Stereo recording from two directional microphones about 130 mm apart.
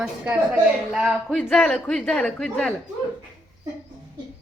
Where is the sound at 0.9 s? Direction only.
5° right (ahead or behind).